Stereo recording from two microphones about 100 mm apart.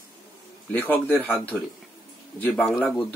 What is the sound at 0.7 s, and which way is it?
Speech, 20° left (ahead or behind).